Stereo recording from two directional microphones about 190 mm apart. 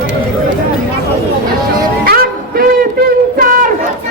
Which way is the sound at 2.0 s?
50° right (ahead or behind).